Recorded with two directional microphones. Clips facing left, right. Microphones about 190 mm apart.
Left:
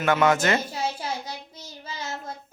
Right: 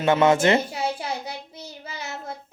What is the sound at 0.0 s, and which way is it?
Speech, 25° right (ahead or behind).